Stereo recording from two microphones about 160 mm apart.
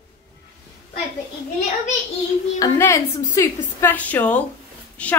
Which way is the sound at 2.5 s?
20° left (ahead or behind).